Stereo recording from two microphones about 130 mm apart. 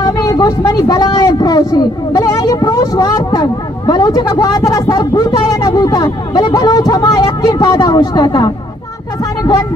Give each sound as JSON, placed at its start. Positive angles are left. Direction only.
{"t": 0.0, "sound": "speech", "side_deg": 30}